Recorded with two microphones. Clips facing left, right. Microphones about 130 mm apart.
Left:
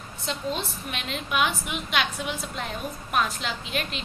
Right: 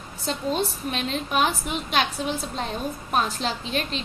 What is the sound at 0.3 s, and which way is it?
A woman's voice, 40° right (ahead or behind).